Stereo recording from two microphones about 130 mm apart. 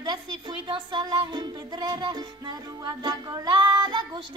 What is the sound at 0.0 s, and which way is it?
Speech, 35° right (ahead or behind).